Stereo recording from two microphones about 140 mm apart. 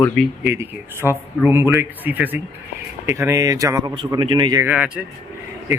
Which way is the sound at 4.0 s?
35° right (ahead or behind).